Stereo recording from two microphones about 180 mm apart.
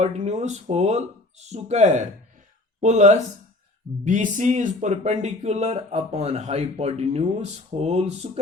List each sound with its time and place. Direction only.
0.0 s speech: 40° right (ahead or behind)